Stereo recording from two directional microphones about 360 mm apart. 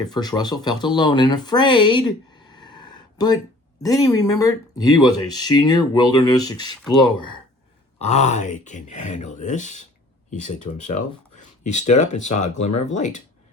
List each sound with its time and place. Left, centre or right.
0.0 s speech: centre